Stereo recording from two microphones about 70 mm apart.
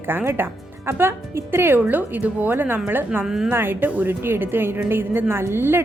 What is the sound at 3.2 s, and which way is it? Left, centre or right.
Speech, centre.